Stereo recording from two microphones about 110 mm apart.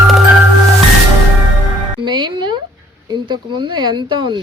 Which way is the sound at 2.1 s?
45° right (ahead or behind).